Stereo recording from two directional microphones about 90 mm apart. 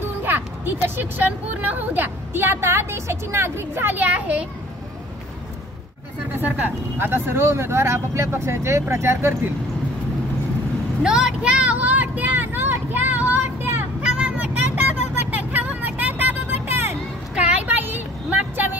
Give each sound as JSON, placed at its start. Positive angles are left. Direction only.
{"t": 0.8, "sound": "a woman's voice", "side_deg": -25}
{"t": 6.3, "sound": "a woman's voice", "side_deg": -20}
{"t": 11.0, "sound": "vehicle", "side_deg": -5}
{"t": 14.0, "sound": "vehicle", "side_deg": -10}